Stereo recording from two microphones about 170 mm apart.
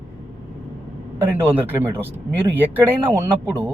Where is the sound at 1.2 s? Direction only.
10° right (ahead or behind).